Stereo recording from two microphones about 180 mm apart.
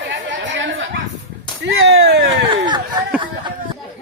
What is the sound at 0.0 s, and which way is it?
Chatter, 90° right.